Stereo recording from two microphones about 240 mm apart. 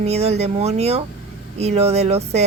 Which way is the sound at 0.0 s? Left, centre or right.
Right.